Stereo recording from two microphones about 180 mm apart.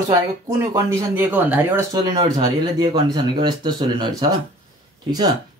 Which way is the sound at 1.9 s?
25° right (ahead or behind).